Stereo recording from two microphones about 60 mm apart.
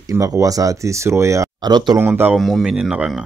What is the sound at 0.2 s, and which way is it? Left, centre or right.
Speech, right.